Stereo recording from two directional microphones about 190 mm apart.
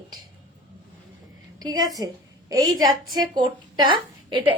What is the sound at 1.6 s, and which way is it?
Speech, 20° right (ahead or behind).